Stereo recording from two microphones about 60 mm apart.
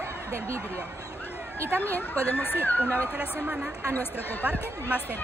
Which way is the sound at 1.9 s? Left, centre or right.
Left.